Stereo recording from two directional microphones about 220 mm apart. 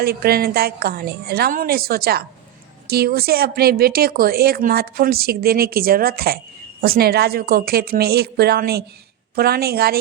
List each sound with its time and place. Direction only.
0.0 s a woman's voice: 45° right (ahead or behind)